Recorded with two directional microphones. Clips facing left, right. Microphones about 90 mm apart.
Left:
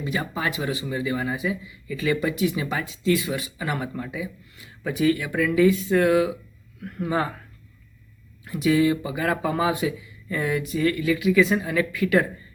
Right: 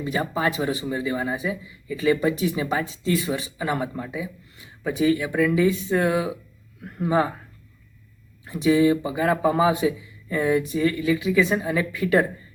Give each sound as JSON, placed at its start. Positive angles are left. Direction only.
{"t": 0.0, "sound": "speech", "side_deg": -30}
{"t": 8.4, "sound": "speech", "side_deg": -25}